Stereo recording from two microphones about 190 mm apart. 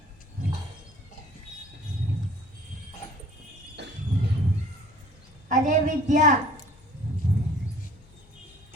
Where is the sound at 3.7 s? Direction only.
65° right (ahead or behind).